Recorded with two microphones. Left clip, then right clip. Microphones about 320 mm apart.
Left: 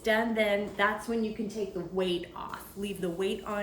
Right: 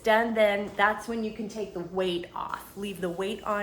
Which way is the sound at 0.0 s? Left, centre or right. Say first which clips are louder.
Right 5 dB; centre.